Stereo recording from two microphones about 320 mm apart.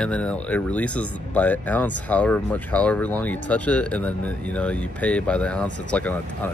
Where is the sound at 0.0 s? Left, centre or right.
Centre.